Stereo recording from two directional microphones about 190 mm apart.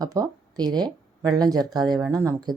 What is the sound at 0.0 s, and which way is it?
Speech, 20° right (ahead or behind).